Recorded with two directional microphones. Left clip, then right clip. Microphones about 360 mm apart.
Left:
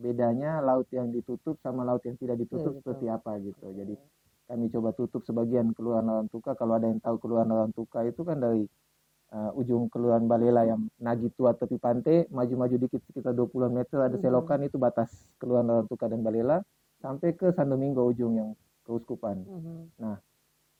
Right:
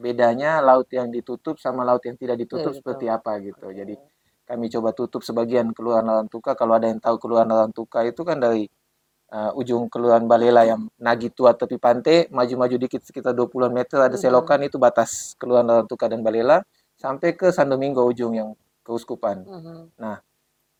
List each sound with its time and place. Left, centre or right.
0.0 s speech: centre